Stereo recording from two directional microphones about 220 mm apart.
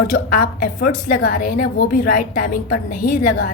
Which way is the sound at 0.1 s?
40° left (ahead or behind).